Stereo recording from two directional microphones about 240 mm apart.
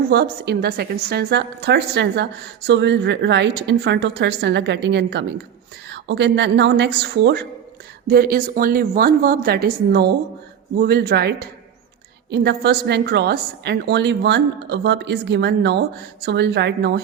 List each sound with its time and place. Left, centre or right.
0.1 s a woman's voice: right